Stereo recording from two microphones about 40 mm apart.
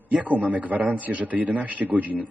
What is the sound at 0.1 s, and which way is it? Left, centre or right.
A man's voice, right.